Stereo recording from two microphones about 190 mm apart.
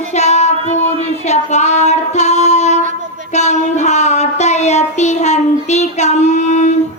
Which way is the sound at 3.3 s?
35° left (ahead or behind).